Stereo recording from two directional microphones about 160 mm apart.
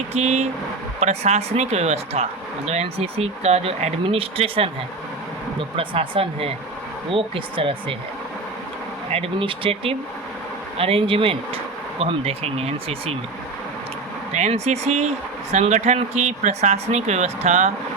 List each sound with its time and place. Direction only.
0.1 s speech: 45° right (ahead or behind)
9.0 s speech: 35° right (ahead or behind)
14.3 s speech: 45° right (ahead or behind)